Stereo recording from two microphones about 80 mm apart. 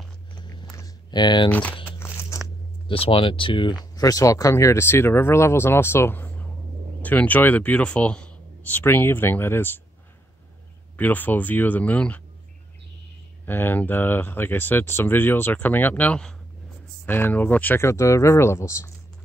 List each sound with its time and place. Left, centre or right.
1.1 s speech: left
1.5 s speech: centre
1.9 s crunch: left
3.2 s speech: left
3.9 s speech: left
11.0 s speech: left
13.5 s speech: left